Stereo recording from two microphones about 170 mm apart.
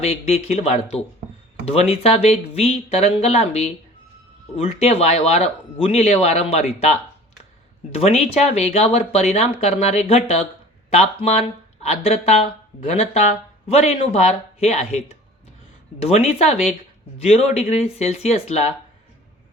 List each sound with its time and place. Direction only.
0.0 s speech: 40° left (ahead or behind)
7.9 s speech: 40° left (ahead or behind)
16.0 s speech: 40° left (ahead or behind)